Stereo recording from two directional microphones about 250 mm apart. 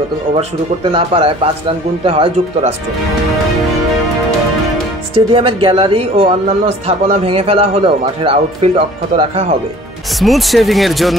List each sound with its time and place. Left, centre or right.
0.9 s speech: right
5.1 s speech: right
10.2 s speech: centre